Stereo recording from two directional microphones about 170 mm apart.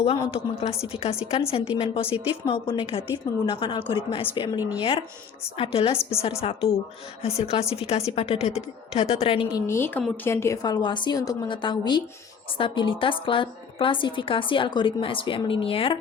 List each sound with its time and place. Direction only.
0.3 s a woman's voice: 35° left (ahead or behind)
9.6 s a woman's voice: 15° left (ahead or behind); by 16.0 s 35° left (ahead or behind)